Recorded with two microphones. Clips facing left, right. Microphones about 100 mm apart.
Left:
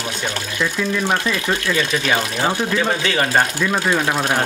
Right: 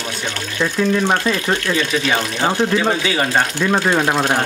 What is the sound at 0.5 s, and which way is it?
Speech, 25° right (ahead or behind).